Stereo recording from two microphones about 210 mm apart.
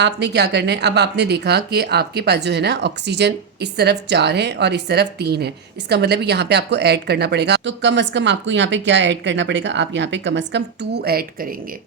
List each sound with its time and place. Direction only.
0.0 s speech: 55° right (ahead or behind)